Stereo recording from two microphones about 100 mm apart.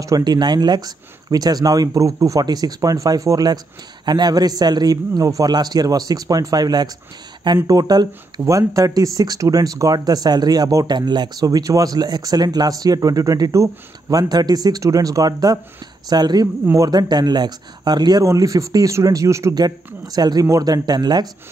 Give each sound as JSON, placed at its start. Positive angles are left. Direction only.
{"t": 0.0, "sound": "speech", "side_deg": -40}
{"t": 18.2, "sound": "speech", "side_deg": -30}
{"t": 19.6, "sound": "speech", "side_deg": -45}